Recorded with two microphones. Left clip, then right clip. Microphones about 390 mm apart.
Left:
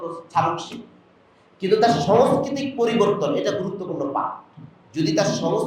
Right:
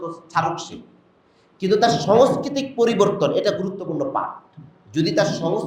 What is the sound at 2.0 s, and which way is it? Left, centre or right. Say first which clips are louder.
A man's voice: right 1 dB; right.